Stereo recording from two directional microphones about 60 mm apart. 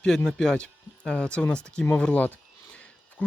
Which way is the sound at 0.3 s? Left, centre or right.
Centre.